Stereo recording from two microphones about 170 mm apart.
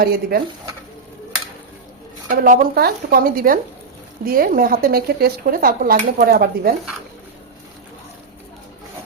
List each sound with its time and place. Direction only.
0.0 s speech: 65° right (ahead or behind)
2.4 s speech: 60° right (ahead or behind)